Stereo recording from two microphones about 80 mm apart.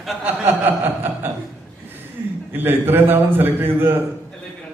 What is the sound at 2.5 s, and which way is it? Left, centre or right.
A man's voice, right.